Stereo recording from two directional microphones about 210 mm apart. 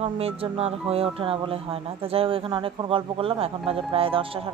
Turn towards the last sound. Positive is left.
turn(degrees=-25)  # may be behind; listen again after turning